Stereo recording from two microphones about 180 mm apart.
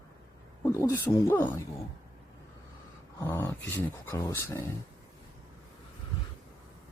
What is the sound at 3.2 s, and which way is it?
Speech, 15° left (ahead or behind).